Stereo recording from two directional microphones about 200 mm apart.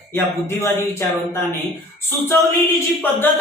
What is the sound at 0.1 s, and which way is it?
Speech, 10° left (ahead or behind).